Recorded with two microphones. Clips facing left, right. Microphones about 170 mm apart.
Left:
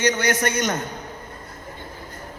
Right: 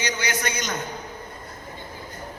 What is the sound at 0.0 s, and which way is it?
Speech, 55° left (ahead or behind).